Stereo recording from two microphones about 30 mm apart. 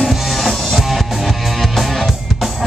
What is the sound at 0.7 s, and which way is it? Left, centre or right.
Music, centre.